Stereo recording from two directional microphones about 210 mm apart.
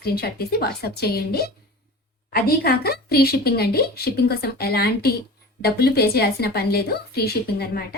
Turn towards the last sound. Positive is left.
turn(degrees=45)  # may be behind; listen again after turning